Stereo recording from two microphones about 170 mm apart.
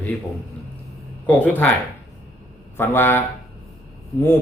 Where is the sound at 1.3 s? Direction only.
10° left (ahead or behind).